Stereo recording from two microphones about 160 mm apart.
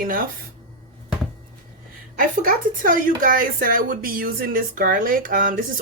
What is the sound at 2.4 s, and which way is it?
A woman's voice, 60° right (ahead or behind).